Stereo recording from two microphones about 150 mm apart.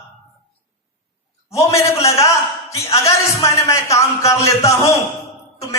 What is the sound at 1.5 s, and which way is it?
Speech, 20° left (ahead or behind).